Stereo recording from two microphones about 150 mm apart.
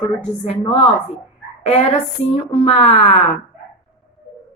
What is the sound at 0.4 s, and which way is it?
Speech, 40° left (ahead or behind).